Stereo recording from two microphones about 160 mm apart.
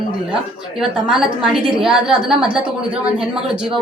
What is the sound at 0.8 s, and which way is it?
A woman's voice, 5° right (ahead or behind).